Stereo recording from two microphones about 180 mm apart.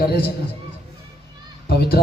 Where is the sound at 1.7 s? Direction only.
60° left (ahead or behind).